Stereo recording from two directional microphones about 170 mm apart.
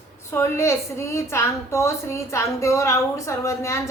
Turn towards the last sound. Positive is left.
turn(degrees=15)  # may be behind; listen again after turning